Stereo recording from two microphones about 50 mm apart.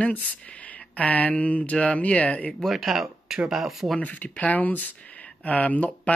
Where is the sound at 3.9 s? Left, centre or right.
Left.